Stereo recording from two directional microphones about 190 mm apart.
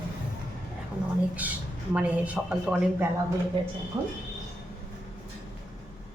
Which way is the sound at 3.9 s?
20° right (ahead or behind).